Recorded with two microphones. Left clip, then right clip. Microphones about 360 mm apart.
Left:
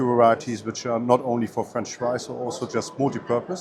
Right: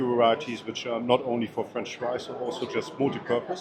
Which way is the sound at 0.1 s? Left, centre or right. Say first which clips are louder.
Left 5 dB; left.